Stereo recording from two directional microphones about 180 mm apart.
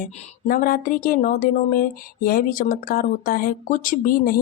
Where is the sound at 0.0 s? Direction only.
50° left (ahead or behind).